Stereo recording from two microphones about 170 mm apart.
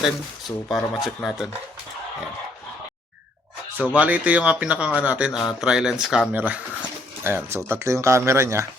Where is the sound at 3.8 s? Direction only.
10° right (ahead or behind).